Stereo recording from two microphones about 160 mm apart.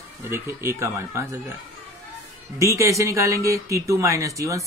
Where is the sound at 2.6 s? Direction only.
20° right (ahead or behind).